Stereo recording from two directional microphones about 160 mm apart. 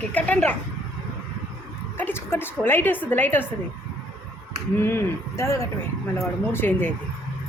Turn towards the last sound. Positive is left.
turn(degrees=15)  # may be behind; listen again after turning